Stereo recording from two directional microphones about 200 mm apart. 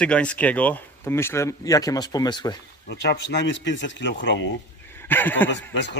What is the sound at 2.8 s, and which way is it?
A man's voice, 55° left (ahead or behind).